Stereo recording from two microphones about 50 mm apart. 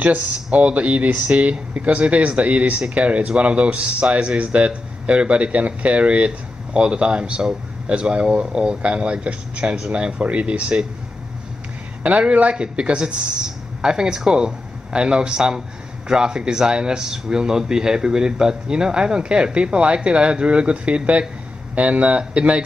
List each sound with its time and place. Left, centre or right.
0.0 s speech: right
12.0 s a man's voice: right